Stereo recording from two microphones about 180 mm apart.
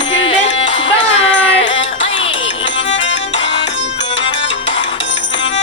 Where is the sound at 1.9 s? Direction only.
30° left (ahead or behind).